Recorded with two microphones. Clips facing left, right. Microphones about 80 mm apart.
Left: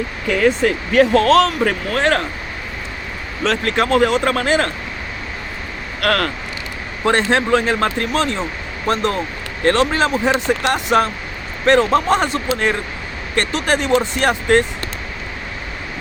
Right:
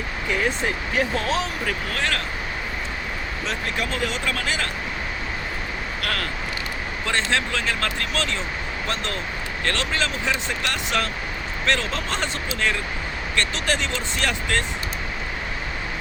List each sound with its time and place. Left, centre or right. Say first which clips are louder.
0.3 s speech: left 9 dB; left
1.6 s speech: left 9 dB; left
3.4 s speech: left 11 dB; left
6.0 s speech: left 12 dB; left